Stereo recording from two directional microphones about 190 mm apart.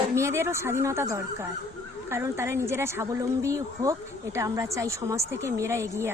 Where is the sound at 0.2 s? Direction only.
15° right (ahead or behind).